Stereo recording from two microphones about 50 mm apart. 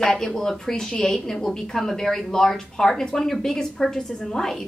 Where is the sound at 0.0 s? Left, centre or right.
Centre.